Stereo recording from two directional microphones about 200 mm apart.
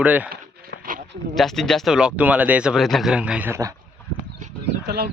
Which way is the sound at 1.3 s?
Centre (ahead or behind).